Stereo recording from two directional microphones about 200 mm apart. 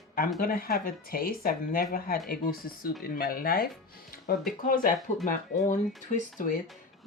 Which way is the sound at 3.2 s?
45° left (ahead or behind).